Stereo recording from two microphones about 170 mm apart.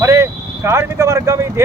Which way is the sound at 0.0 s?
15° right (ahead or behind).